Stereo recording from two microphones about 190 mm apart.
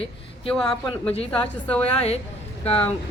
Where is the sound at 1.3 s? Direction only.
5° left (ahead or behind).